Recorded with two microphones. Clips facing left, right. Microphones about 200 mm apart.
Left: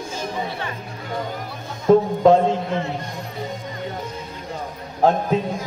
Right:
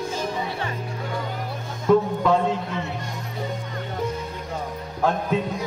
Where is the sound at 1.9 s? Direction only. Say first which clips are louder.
Left 5 dB; 40° left (ahead or behind).